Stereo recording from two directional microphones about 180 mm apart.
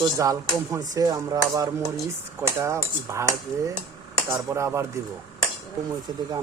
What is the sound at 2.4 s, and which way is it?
Cutlery, 15° right (ahead or behind).